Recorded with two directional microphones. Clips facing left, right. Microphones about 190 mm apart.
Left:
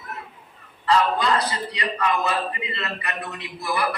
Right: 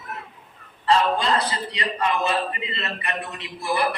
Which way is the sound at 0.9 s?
25° right (ahead or behind).